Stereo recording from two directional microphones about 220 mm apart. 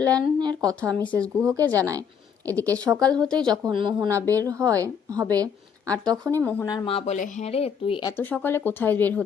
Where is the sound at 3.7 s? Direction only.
20° right (ahead or behind).